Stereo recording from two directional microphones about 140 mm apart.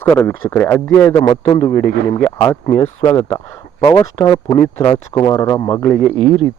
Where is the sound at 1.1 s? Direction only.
30° left (ahead or behind).